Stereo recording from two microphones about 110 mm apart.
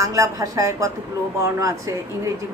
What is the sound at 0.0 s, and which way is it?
A woman's voice, 30° right (ahead or behind).